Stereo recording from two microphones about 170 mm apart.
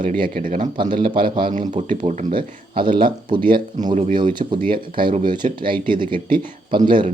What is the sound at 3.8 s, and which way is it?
Speech, 45° right (ahead or behind).